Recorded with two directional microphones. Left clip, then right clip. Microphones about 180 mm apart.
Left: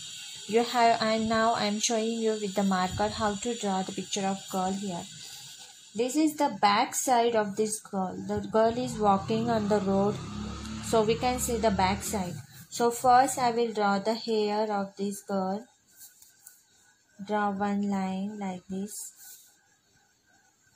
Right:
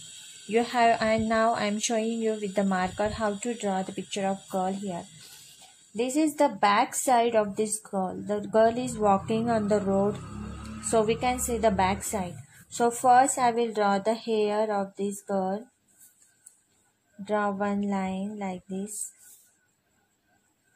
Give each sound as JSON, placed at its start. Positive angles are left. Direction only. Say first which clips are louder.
{"t": 0.5, "sound": "speech", "louder": "right 1 dB", "side_deg": -15}
{"t": 17.2, "sound": "speech", "louder": "right 1 dB", "side_deg": -20}